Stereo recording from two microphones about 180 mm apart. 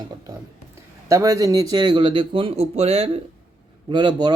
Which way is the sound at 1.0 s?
20° right (ahead or behind).